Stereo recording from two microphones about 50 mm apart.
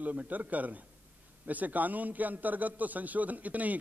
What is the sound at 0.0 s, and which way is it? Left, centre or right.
A man's voice, right.